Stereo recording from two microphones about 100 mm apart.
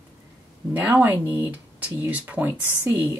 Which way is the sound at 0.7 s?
20° right (ahead or behind).